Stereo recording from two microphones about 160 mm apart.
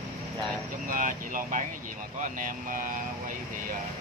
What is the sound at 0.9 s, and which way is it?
Speech, 55° right (ahead or behind).